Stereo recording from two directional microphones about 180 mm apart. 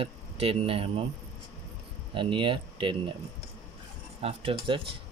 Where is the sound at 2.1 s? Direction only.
25° right (ahead or behind).